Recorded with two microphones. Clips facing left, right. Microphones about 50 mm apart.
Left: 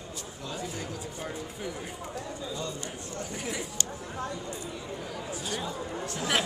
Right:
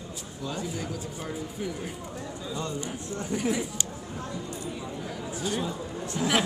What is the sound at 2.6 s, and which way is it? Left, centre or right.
Speech, right.